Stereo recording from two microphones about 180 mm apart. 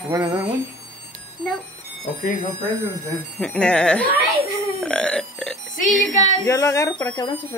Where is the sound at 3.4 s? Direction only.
5° left (ahead or behind).